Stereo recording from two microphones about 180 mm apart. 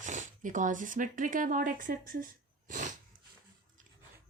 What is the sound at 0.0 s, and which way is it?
Speech, 45° right (ahead or behind).